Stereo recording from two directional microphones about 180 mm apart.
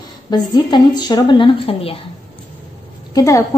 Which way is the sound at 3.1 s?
20° left (ahead or behind).